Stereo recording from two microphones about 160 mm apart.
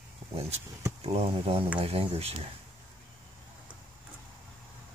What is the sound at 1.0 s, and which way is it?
Speech, 40° right (ahead or behind).